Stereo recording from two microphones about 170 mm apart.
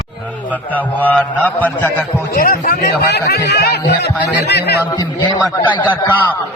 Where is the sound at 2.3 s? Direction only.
55° left (ahead or behind); by 4.8 s 75° left (ahead or behind).